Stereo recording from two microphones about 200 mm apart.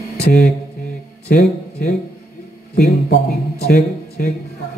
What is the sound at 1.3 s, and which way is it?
Speech, 35° left (ahead or behind).